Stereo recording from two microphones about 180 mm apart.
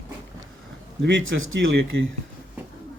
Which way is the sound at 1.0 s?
90° right.